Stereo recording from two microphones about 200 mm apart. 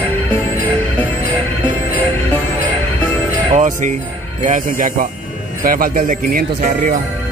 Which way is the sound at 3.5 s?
35° right (ahead or behind).